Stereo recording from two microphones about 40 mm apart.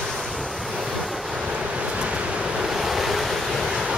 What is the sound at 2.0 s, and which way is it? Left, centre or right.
Waves, right.